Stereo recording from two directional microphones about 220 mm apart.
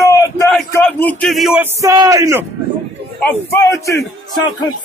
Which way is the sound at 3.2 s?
15° left (ahead or behind).